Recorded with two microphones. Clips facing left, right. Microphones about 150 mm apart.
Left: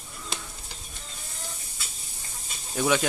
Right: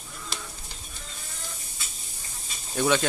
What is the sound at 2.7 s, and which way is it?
Speech, 5° left (ahead or behind).